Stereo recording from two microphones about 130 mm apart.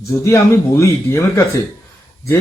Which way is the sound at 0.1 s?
20° left (ahead or behind).